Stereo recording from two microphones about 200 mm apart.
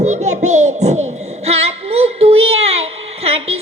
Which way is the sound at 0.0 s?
35° right (ahead or behind).